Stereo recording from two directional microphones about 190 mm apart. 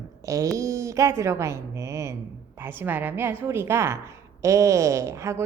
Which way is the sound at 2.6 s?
10° right (ahead or behind).